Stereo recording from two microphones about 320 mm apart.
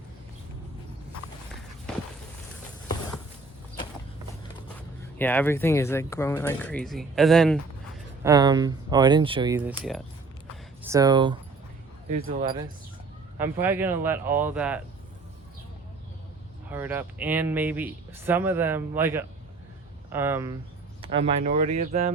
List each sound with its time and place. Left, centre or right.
5.1 s speech: centre
8.2 s speech: centre
16.6 s speech: centre
21.0 s speech: centre